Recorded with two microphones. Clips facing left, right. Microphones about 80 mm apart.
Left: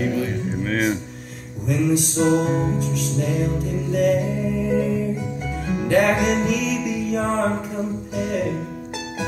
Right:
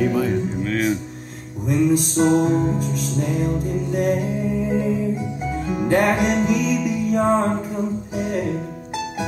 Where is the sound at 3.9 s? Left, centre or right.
Right.